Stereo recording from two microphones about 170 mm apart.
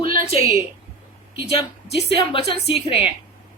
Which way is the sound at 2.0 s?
30° left (ahead or behind).